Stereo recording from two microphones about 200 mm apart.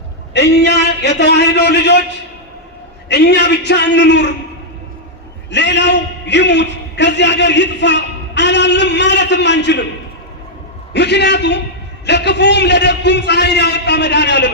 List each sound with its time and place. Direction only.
0.3 s a man's voice: 60° left (ahead or behind)
3.1 s a man's voice: 60° left (ahead or behind)
5.5 s a man's voice: 60° left (ahead or behind)
10.9 s a man's voice: 60° left (ahead or behind)